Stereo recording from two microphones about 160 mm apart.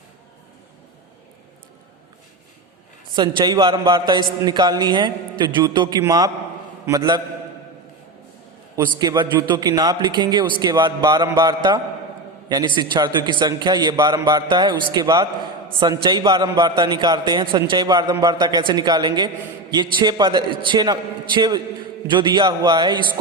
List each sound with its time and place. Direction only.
3.2 s a man's voice: 25° right (ahead or behind)
8.7 s a man's voice: 20° right (ahead or behind)